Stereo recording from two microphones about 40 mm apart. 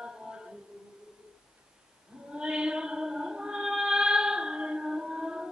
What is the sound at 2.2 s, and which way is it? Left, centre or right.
Music, right.